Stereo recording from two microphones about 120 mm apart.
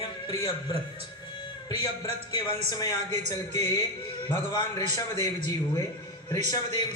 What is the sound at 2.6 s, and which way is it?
Speech, 30° left (ahead or behind).